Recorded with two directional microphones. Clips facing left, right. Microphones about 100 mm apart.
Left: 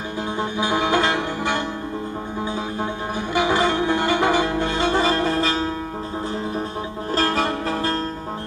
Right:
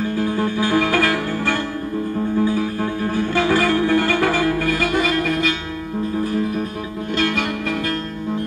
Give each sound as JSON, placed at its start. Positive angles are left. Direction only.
{"t": 0.4, "sound": "music", "side_deg": 20}
{"t": 3.3, "sound": "music", "side_deg": 20}
{"t": 7.2, "sound": "music", "side_deg": 35}